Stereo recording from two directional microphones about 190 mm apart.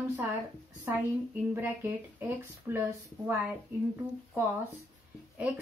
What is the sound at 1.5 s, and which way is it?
Speech, 10° right (ahead or behind).